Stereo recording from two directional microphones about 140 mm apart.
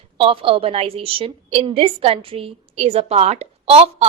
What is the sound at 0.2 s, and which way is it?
A woman's voice, 40° right (ahead or behind).